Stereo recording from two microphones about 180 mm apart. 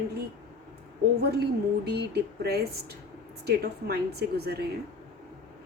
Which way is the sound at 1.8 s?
65° right (ahead or behind).